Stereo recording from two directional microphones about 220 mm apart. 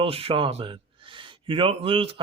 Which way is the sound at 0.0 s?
25° right (ahead or behind).